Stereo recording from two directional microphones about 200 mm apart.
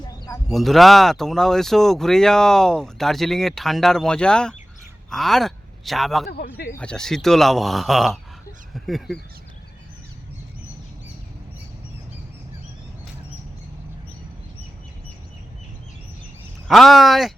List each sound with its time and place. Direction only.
0.0 s a sound: 20° left (ahead or behind)
0.5 s speech: centre (ahead or behind)
6.2 s speech: 50° left (ahead or behind)
6.7 s speech: 5° left (ahead or behind)
16.6 s speech: centre (ahead or behind)